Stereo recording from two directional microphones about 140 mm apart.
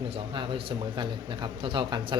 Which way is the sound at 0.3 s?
35° right (ahead or behind).